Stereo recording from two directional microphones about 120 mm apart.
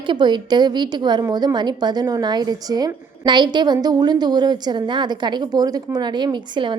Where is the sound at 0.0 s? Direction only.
40° right (ahead or behind).